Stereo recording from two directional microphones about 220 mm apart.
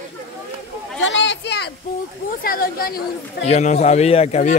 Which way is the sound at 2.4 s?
40° left (ahead or behind).